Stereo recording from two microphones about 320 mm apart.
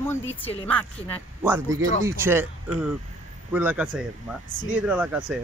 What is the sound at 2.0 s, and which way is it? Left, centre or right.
Speech, centre.